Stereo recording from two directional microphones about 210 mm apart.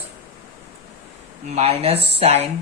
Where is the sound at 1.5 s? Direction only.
30° right (ahead or behind).